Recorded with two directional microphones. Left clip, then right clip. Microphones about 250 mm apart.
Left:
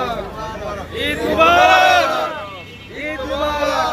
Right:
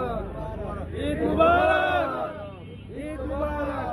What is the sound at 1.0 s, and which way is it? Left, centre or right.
Speech, right.